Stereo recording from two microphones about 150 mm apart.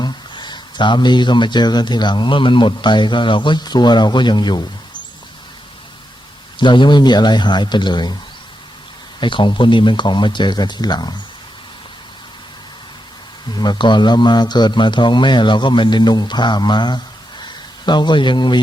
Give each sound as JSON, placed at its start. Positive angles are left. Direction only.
{"t": 0.0, "sound": "speech", "side_deg": 30}
{"t": 6.6, "sound": "a man's voice", "side_deg": 30}
{"t": 9.2, "sound": "speech", "side_deg": 30}
{"t": 13.6, "sound": "a man's voice", "side_deg": 30}